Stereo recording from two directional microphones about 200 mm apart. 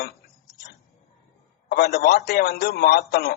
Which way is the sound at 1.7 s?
50° left (ahead or behind).